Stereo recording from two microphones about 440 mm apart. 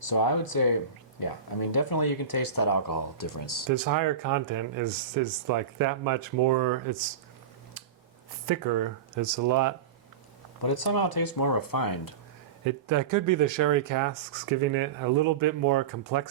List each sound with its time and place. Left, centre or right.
0.0 s speech: left
3.7 s speech: right
8.4 s speech: right
10.6 s speech: left
12.6 s speech: right